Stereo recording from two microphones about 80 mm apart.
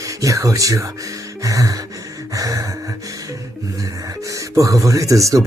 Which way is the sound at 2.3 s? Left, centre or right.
Right.